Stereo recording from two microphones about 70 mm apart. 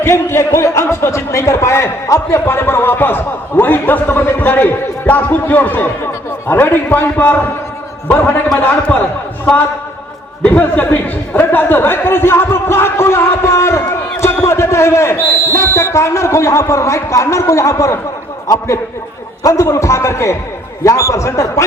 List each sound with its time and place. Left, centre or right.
0.0 s a man's voice: left
10.4 s a man's voice: left